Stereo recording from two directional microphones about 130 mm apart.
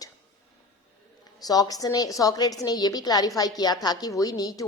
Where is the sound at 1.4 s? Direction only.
30° left (ahead or behind).